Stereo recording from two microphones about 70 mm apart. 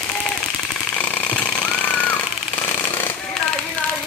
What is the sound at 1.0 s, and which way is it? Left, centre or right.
Jackhammer, left.